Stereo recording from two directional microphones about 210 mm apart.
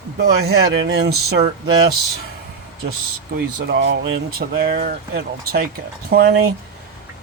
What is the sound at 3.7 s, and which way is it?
Speech, 50° right (ahead or behind).